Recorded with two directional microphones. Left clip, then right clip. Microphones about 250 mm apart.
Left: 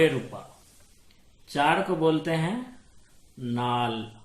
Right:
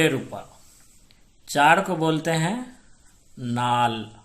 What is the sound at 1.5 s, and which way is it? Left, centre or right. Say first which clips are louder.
Speech: right 6 dB; right.